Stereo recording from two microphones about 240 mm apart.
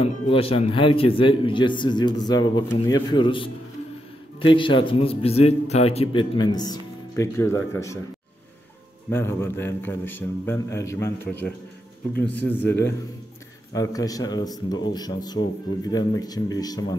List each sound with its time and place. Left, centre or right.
0.0 s a man's voice: left
9.1 s a man's voice: centre